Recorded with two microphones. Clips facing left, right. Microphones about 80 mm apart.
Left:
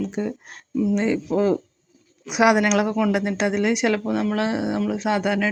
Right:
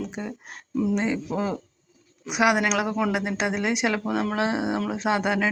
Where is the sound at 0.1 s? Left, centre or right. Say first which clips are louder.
Left 7 dB; centre.